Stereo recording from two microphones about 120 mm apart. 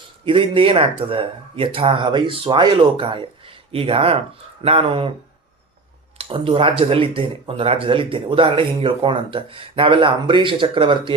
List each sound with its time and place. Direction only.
0.3 s speech: 50° right (ahead or behind)
6.1 s speech: 50° right (ahead or behind)